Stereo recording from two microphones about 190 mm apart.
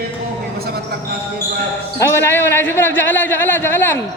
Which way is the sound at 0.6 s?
55° right (ahead or behind).